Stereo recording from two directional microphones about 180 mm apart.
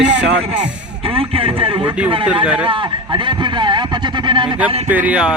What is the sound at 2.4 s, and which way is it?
Speech, 5° right (ahead or behind).